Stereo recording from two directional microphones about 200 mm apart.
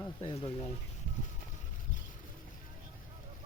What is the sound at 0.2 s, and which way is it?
Speech, 30° left (ahead or behind).